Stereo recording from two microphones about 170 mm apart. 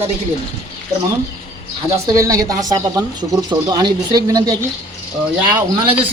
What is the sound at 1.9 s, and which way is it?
Speech, 20° right (ahead or behind).